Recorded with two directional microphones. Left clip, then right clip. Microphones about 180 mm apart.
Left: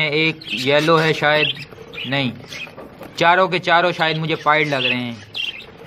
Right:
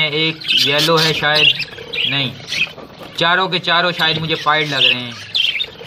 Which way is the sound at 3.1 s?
20° left (ahead or behind).